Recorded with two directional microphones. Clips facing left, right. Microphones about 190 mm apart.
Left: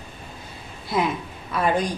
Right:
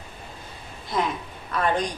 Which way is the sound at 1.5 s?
5° left (ahead or behind).